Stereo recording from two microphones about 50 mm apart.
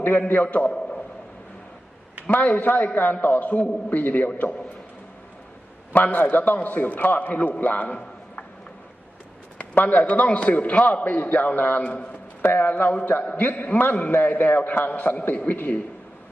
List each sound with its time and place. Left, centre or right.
0.0 s a man's voice: left
0.7 s a sound: left
2.3 s a man's voice: left
5.9 s a man's voice: left
9.6 s a man's voice: left
11.0 s a man's voice: left
12.4 s a man's voice: left
12.7 s a man's voice: left